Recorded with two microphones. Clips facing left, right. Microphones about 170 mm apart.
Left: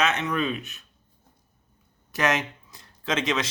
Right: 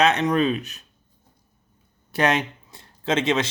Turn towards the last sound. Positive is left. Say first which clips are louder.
# right 4 dB
turn(degrees=-25)  # may be behind; listen again after turning